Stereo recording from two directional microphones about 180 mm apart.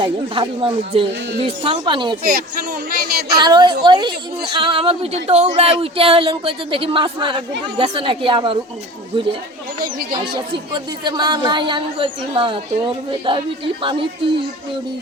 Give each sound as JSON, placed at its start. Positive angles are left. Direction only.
{"t": 0.0, "sound": "speech", "side_deg": -30}
{"t": 2.2, "sound": "a sound", "side_deg": -55}
{"t": 3.3, "sound": "speech", "side_deg": -25}